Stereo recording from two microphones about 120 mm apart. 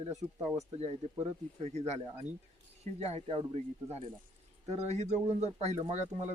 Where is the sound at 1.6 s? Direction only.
70° right (ahead or behind).